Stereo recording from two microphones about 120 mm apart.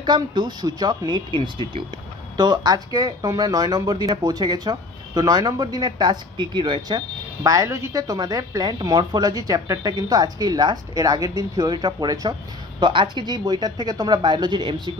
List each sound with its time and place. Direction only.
0.0 s a woman's voice: 40° right (ahead or behind)
7.4 s a woman's voice: 25° right (ahead or behind)
12.8 s a woman's voice: 45° right (ahead or behind)